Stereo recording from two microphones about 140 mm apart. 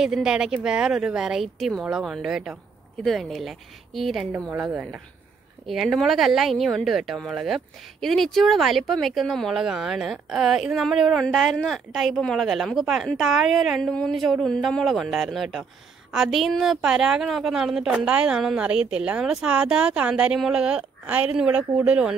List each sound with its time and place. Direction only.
0.0 s speech: 5° right (ahead or behind)